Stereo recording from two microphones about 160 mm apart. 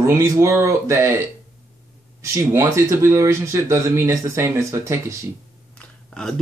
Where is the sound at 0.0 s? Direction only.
15° right (ahead or behind).